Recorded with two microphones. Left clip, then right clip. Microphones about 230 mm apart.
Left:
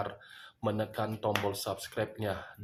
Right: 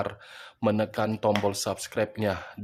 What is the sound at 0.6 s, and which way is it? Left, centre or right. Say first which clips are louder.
Speech: right 7 dB; right.